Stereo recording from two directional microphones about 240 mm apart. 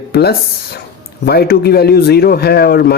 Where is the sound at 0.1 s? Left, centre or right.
Left.